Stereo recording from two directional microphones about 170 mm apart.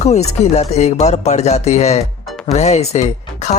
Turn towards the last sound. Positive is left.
turn(degrees=40)  # may be behind; listen again after turning